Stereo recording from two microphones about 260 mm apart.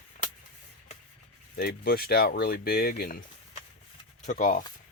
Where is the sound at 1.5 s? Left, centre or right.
Left.